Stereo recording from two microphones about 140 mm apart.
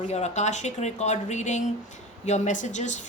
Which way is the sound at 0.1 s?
55° left (ahead or behind).